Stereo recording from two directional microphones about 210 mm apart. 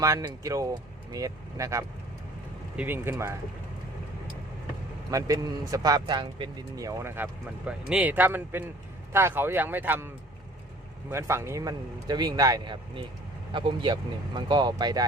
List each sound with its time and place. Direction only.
0.0 s a man's voice: 15° right (ahead or behind)
5.1 s a man's voice: 15° right (ahead or behind)
11.1 s a man's voice: 10° right (ahead or behind)